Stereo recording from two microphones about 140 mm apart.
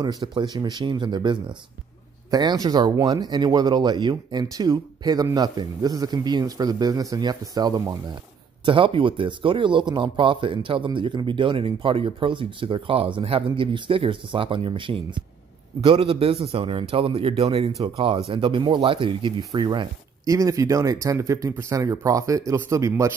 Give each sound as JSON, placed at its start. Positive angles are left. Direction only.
{"t": 0.0, "sound": "a man's voice", "side_deg": -30}